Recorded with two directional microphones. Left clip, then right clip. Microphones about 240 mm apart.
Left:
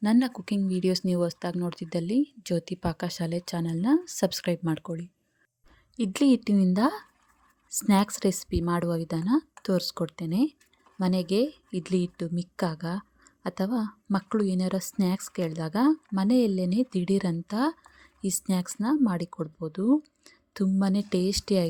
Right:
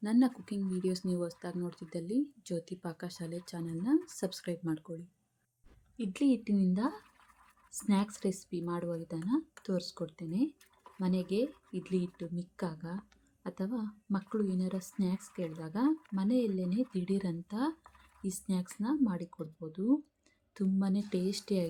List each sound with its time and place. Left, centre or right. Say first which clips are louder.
0.0 s speech: left 5 dB; left